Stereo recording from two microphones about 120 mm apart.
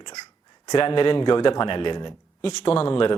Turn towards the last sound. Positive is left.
turn(degrees=45)  # may be behind; listen again after turning